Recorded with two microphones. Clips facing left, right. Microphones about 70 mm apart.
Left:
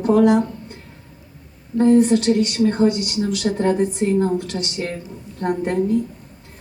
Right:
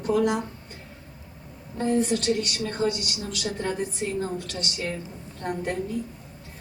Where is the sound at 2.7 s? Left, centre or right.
Left.